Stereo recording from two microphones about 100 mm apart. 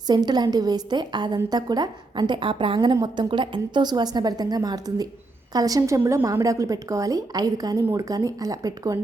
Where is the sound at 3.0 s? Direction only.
50° right (ahead or behind).